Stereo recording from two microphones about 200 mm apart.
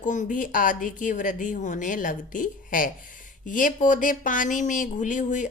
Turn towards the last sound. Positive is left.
turn(degrees=40)  # may be behind; listen again after turning